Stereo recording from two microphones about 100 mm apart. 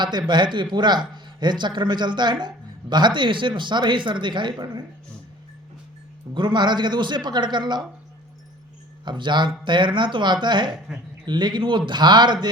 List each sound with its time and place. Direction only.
0.0 s a man's voice: 50° right (ahead or behind)
6.3 s a man's voice: 50° right (ahead or behind)
9.0 s a man's voice: 50° right (ahead or behind)